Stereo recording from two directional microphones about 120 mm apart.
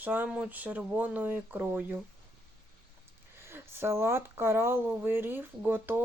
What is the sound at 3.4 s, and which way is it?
Speech, 20° right (ahead or behind).